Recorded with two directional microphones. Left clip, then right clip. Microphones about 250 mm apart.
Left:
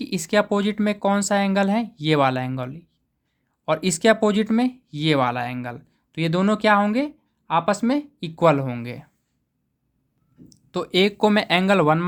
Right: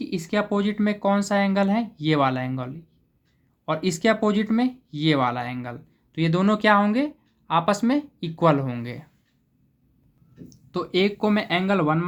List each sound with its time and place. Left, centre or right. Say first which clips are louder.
0.0 s speech: left 5 dB; left
10.5 s speech: left 2 dB; left